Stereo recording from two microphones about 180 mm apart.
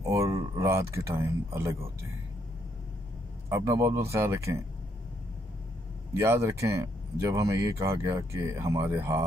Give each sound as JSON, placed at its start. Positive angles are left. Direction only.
{"t": 0.0, "sound": "a sound", "side_deg": -15}
{"t": 3.4, "sound": "speech", "side_deg": -15}
{"t": 6.1, "sound": "speech", "side_deg": -15}